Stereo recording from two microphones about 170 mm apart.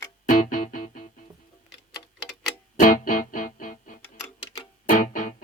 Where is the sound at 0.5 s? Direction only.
55° left (ahead or behind).